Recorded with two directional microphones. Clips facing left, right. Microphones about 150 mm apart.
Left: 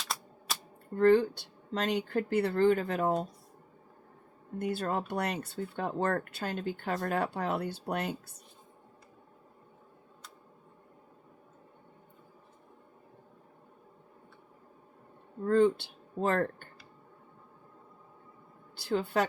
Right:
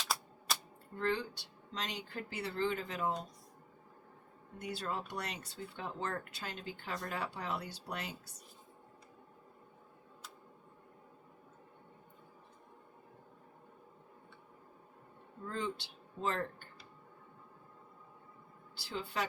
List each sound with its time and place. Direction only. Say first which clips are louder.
0.1 s typewriter: even; centre (ahead or behind)
0.9 s speech: left 13 dB; 50° left (ahead or behind)
4.5 s speech: left 8 dB; 55° left (ahead or behind)
15.4 s speech: left 15 dB; 55° left (ahead or behind)
18.8 s a woman's voice: left 9 dB; 55° left (ahead or behind)